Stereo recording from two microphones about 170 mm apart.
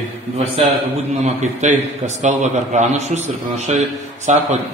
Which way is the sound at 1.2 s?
45° right (ahead or behind).